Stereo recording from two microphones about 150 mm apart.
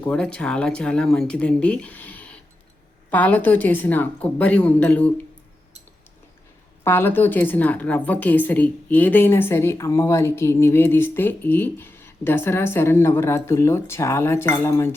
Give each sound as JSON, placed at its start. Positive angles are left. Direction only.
{"t": 0.0, "sound": "a woman's voice", "side_deg": 5}
{"t": 6.8, "sound": "a woman's voice", "side_deg": 15}